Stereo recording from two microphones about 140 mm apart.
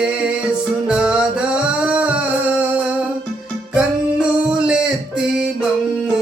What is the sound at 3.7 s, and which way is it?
Music, 5° right (ahead or behind).